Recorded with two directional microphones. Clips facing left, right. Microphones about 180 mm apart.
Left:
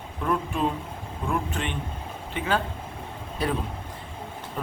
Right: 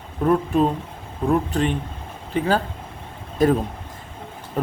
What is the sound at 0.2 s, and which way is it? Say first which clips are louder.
A man's voice: right 8 dB; 40° right (ahead or behind).